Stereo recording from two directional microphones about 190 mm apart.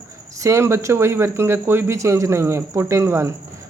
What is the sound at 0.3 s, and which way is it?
A woman's voice, 15° right (ahead or behind).